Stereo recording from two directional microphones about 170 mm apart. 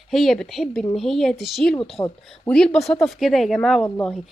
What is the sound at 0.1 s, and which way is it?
Speech, centre (ahead or behind).